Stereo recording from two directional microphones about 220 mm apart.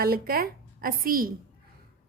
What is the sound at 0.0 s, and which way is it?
A woman's voice, 40° right (ahead or behind).